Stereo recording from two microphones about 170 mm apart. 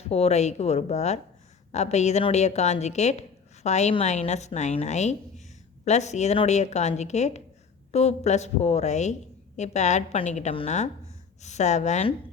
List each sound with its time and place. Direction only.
0.1 s a woman's voice: 40° left (ahead or behind)